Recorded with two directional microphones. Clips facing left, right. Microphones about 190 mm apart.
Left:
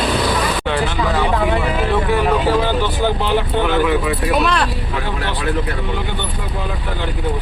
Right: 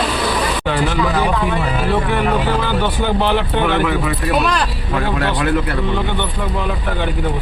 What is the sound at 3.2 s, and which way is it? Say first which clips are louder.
Speech: right 1 dB; 55° right (ahead or behind).